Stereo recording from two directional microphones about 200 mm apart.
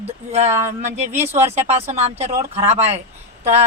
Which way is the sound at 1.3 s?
30° right (ahead or behind).